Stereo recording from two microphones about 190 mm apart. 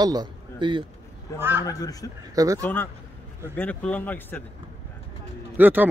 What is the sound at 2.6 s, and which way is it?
Speech, 10° left (ahead or behind).